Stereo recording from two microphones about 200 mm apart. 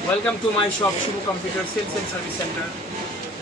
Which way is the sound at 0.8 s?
10° left (ahead or behind).